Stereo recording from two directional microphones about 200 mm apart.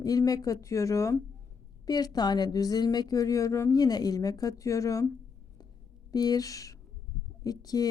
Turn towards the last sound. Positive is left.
turn(degrees=20)  # may be behind; listen again after turning